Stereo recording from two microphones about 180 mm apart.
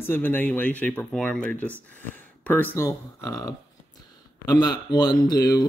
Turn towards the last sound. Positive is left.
turn(degrees=20)  # may be behind; listen again after turning